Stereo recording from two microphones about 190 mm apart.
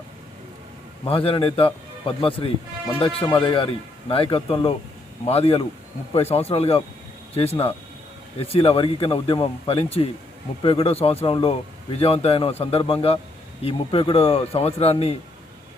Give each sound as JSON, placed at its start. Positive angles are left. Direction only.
{"t": 1.0, "sound": "speech", "side_deg": 30}